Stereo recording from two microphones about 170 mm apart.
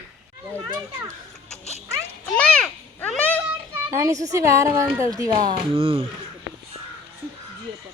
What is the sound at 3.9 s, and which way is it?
A child's voice, 15° right (ahead or behind).